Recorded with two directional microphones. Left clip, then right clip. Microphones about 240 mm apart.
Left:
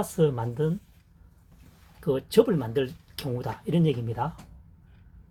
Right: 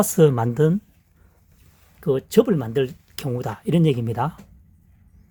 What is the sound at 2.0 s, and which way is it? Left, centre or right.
Speech, right.